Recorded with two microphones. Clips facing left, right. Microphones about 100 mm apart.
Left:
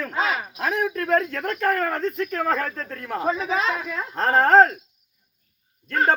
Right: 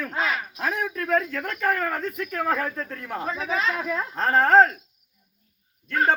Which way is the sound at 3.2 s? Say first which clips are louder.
Left 7 dB; 15° left (ahead or behind).